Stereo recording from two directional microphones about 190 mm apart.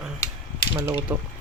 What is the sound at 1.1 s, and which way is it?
Speech, 10° right (ahead or behind).